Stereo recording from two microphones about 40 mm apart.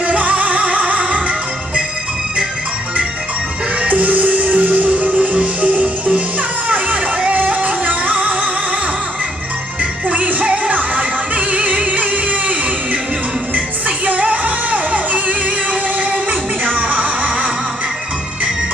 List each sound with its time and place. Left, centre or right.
0.0 s music: right
3.8 s music: right
7.3 s music: right
10.0 s music: right
13.8 s music: right